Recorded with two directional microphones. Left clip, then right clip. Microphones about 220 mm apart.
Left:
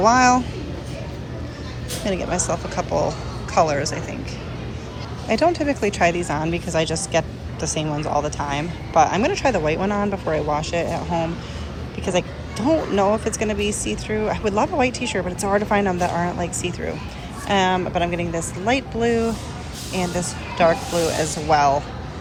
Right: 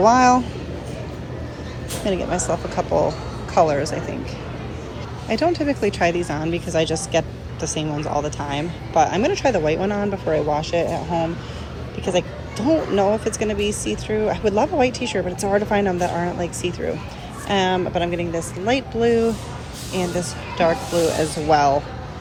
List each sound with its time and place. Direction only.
0.0 s speech: 20° right (ahead or behind)
2.0 s speech: 15° right (ahead or behind)
5.3 s a woman's voice: 15° right (ahead or behind)